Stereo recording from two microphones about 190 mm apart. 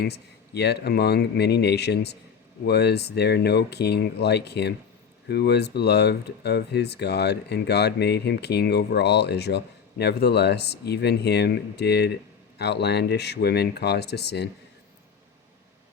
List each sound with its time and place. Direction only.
0.0 s speech: 60° left (ahead or behind)